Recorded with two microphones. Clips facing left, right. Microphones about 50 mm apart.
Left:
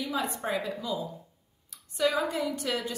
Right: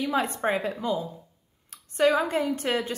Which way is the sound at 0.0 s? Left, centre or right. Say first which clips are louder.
Right 6 dB; right.